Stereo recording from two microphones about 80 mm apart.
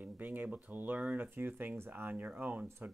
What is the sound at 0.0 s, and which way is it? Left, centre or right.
Speech, right.